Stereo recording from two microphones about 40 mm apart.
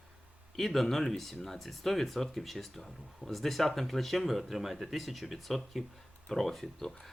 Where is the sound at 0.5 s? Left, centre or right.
Centre.